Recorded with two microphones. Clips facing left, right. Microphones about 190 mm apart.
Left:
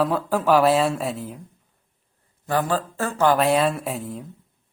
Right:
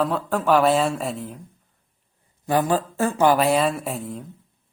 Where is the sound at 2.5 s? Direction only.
15° right (ahead or behind).